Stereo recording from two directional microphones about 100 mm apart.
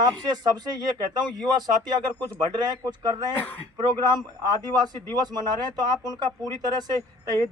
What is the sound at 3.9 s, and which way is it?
Speech, 40° right (ahead or behind).